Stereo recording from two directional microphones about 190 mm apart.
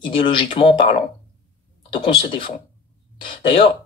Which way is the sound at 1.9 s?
25° left (ahead or behind).